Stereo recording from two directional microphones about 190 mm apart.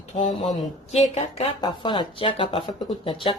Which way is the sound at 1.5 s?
25° left (ahead or behind).